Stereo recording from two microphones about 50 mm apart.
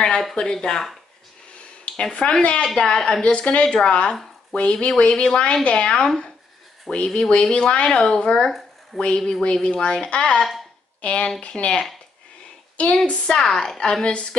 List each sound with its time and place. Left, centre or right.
0.4 s a woman's voice: centre
2.0 s a woman's voice: centre
8.5 s a sound: centre
9.0 s a woman's voice: centre
13.4 s a woman's voice: centre